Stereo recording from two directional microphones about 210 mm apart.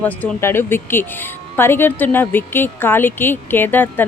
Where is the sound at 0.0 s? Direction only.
10° left (ahead or behind).